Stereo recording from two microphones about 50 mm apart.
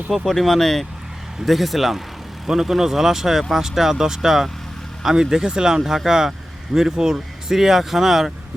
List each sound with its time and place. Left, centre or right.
0.1 s speech: centre